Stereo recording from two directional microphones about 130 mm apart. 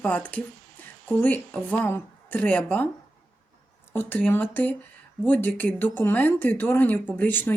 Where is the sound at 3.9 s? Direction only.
15° left (ahead or behind).